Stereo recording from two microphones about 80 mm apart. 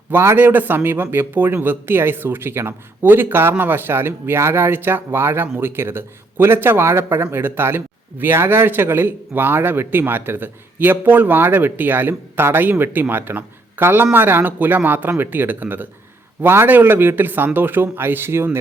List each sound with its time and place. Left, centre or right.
0.1 s a man's voice: right